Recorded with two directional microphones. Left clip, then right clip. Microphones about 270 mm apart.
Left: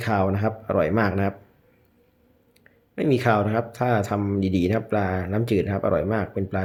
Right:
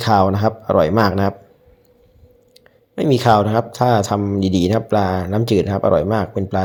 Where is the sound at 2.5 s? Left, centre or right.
Centre.